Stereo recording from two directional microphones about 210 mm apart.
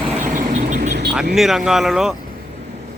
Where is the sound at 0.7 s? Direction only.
40° right (ahead or behind).